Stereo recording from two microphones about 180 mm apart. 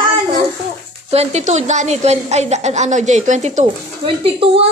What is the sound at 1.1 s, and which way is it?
A woman's voice, 35° right (ahead or behind).